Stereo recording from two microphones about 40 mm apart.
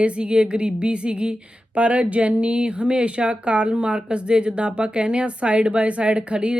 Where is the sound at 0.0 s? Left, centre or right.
Right.